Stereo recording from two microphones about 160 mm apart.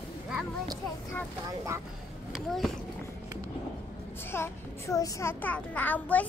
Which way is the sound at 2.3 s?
Centre (ahead or behind).